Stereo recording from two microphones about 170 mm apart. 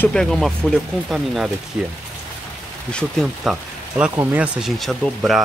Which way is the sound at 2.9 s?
5° right (ahead or behind).